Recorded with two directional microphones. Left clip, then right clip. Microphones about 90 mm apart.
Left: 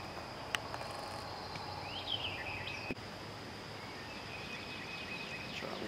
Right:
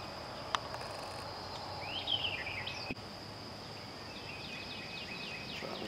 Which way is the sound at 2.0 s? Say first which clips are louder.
Right 5 dB; 40° right (ahead or behind).